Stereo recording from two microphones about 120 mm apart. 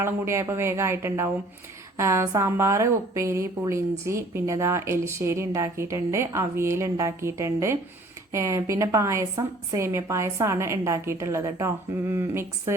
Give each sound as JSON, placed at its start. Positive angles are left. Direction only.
{"t": 0.0, "sound": "a woman's voice", "side_deg": -25}